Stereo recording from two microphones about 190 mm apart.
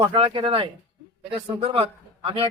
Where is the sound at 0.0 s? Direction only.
30° right (ahead or behind).